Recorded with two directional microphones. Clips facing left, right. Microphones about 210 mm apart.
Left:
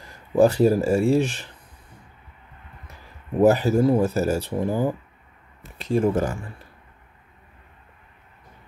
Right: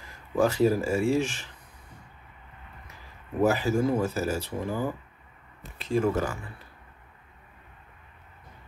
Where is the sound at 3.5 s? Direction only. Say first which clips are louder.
Left 6 dB; 35° left (ahead or behind).